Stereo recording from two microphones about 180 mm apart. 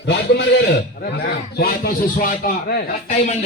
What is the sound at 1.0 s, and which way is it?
A man's voice, 65° left (ahead or behind).